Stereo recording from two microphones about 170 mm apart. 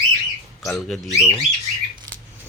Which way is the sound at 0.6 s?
Centre (ahead or behind).